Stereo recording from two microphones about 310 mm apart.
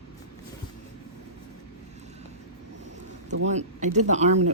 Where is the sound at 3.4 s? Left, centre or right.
Right.